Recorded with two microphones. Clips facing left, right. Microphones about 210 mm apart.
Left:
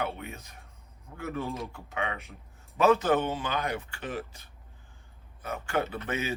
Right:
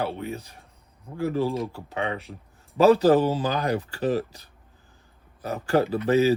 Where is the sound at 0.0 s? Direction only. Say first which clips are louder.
Right 5 dB; 35° right (ahead or behind).